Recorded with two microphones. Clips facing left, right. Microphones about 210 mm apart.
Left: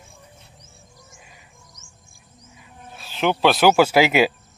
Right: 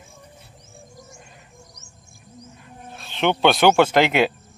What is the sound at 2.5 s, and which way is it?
Speech, 5° left (ahead or behind).